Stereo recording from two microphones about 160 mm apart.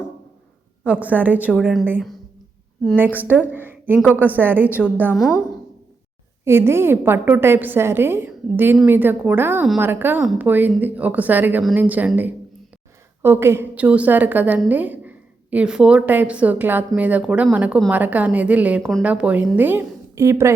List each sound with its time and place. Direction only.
0.9 s a woman's voice: 10° right (ahead or behind)
6.4 s a woman's voice: 15° right (ahead or behind)